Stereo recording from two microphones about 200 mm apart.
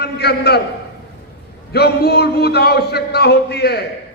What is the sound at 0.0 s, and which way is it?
Speech, 55° left (ahead or behind).